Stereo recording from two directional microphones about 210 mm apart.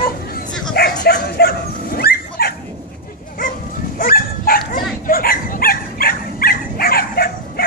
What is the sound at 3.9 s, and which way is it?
Dog, 45° left (ahead or behind).